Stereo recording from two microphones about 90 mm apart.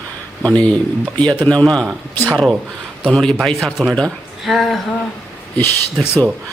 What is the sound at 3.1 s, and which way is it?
A man's voice, 5° left (ahead or behind).